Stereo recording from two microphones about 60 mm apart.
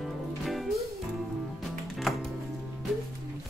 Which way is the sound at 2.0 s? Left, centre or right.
Centre.